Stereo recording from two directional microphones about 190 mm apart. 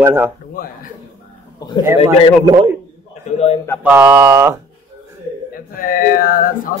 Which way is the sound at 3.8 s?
10° right (ahead or behind).